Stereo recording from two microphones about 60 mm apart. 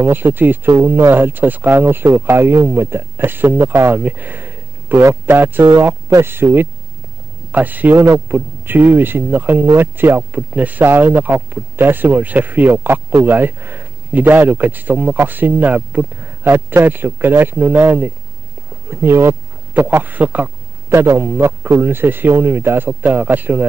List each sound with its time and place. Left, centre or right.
0.0 s speech: right
0.7 s speech: right
1.1 s speech: right
4.0 s speech: right
7.5 s a man's voice: right
18.9 s speech: right
20.0 s a man's voice: right
21.0 s speech: right